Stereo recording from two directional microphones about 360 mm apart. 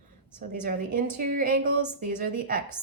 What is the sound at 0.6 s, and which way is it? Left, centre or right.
A woman's voice, right.